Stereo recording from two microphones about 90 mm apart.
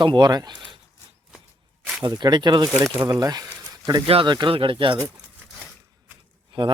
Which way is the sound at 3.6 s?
45° right (ahead or behind).